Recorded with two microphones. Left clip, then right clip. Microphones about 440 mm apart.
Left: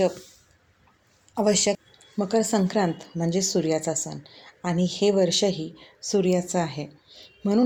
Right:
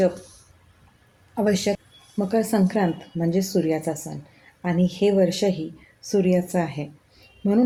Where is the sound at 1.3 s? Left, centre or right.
Right.